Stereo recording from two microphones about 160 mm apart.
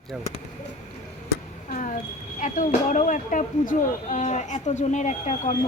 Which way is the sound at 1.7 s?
55° left (ahead or behind).